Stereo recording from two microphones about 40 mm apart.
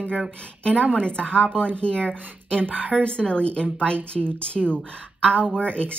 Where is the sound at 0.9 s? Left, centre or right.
Left.